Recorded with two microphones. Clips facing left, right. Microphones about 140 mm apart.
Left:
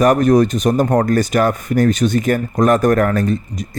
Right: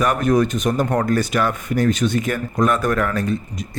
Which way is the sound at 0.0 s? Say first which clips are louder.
Left 5 dB; 40° left (ahead or behind).